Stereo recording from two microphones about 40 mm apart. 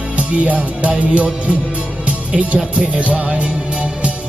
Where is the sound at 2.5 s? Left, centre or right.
Right.